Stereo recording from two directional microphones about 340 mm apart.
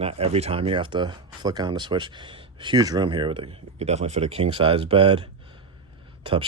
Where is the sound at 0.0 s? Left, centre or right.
Centre.